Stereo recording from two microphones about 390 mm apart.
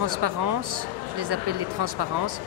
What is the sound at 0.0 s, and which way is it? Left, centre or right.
Speech, right.